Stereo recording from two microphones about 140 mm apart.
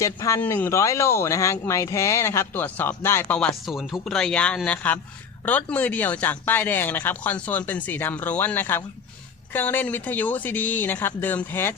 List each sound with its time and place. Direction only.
0.0 s speech: 20° left (ahead or behind)
3.7 s speech: centre (ahead or behind); by 11.7 s 15° left (ahead or behind)